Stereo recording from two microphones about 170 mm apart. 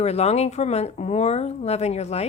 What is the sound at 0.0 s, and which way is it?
Speech, 40° left (ahead or behind).